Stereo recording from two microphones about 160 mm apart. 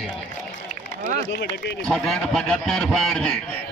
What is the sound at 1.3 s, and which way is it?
Speech, 90° left.